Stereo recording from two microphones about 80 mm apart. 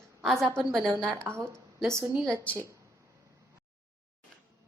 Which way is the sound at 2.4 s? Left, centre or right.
Centre.